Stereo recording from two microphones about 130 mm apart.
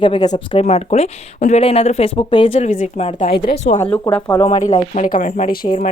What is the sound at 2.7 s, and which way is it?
Speech, 70° left (ahead or behind).